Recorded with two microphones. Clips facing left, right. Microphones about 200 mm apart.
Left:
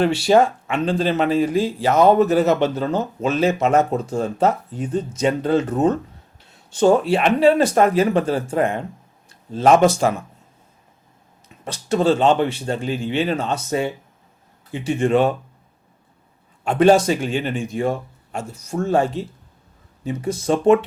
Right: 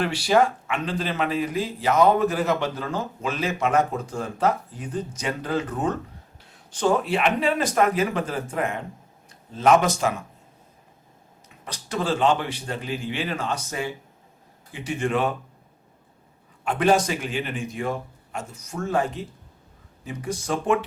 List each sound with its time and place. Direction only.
0.0 s speech: 25° left (ahead or behind)
11.4 s speech: 25° left (ahead or behind)
16.6 s speech: 30° left (ahead or behind)